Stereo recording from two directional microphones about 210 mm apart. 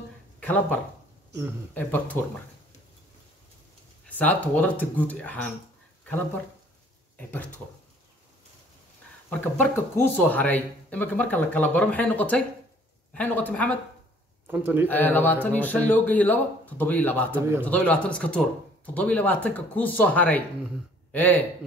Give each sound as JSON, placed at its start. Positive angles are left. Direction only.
{"t": 0.4, "sound": "speech", "side_deg": 5}
{"t": 4.1, "sound": "speech", "side_deg": 5}
{"t": 7.2, "sound": "speech", "side_deg": 10}
{"t": 9.3, "sound": "speech", "side_deg": 5}
{"t": 14.5, "sound": "a man's voice", "side_deg": -10}
{"t": 14.9, "sound": "a man's voice", "side_deg": 10}